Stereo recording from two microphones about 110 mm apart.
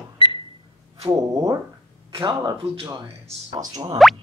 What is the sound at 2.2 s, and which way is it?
Speech, 45° right (ahead or behind).